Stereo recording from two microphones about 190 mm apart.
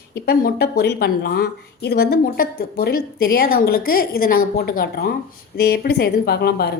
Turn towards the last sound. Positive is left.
turn(degrees=55)  # may be behind; listen again after turning